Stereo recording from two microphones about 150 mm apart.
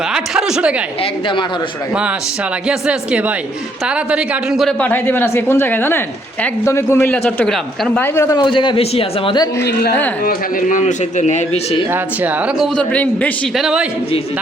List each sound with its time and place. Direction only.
0.1 s a sound: 5° right (ahead or behind)
2.6 s speech: 5° right (ahead or behind)
4.8 s a man's voice: 15° left (ahead or behind)
8.0 s a man's voice: 15° left (ahead or behind)
8.4 s a man's voice: 30° left (ahead or behind)
10.2 s a man's voice: 60° left (ahead or behind)
12.7 s a man's voice: 10° left (ahead or behind)
13.6 s speech: 5° right (ahead or behind)